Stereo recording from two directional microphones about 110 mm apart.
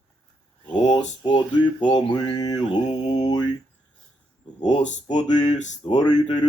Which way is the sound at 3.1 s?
40° left (ahead or behind).